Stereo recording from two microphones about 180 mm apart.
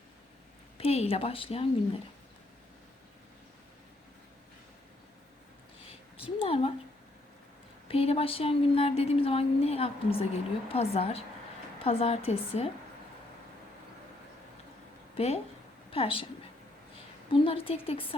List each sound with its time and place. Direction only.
0.8 s speech: 35° left (ahead or behind)
6.1 s speech: 30° left (ahead or behind)
7.9 s speech: 30° left (ahead or behind)
15.9 s a woman's voice: 30° left (ahead or behind)
17.4 s speech: 30° left (ahead or behind)